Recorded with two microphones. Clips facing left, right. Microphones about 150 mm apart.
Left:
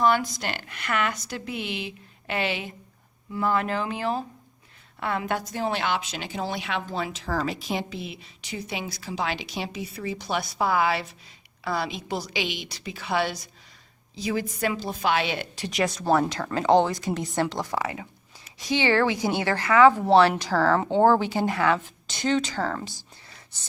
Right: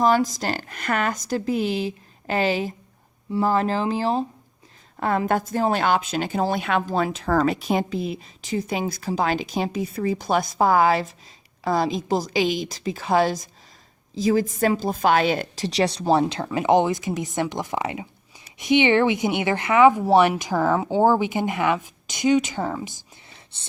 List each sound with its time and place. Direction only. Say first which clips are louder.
0.0 s a woman's voice: right 3 dB; 40° right (ahead or behind)
16.5 s a woman's voice: right 1 dB; 15° right (ahead or behind)
20.0 s speech: right 1 dB; 5° right (ahead or behind)
20.7 s speech: right 1 dB; 5° right (ahead or behind)
23.5 s a woman's voice: right 2 dB; 25° right (ahead or behind)